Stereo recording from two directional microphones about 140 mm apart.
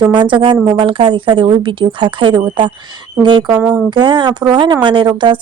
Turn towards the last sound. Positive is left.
turn(degrees=-35)  # may be behind; listen again after turning